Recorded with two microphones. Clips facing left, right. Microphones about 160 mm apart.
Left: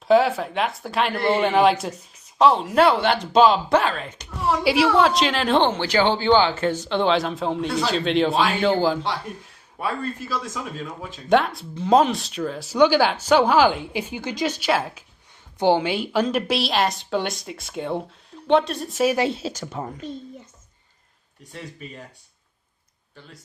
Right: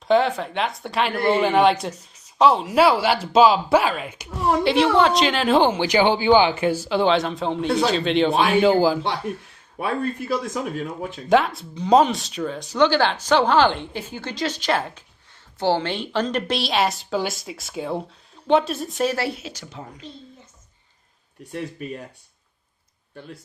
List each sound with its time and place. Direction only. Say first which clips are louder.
0.1 s speech: left 1 dB; 5° left (ahead or behind)
4.6 s speech: even; 5° left (ahead or behind)
9.8 s speech: right 3 dB; 55° right (ahead or behind)
11.3 s a woman's voice: right 1 dB; centre (ahead or behind)
15.5 s speech: left 3 dB; 15° left (ahead or behind)
19.1 s speech: left 4 dB; 20° left (ahead or behind)
19.4 s speech: left 7 dB; 40° left (ahead or behind)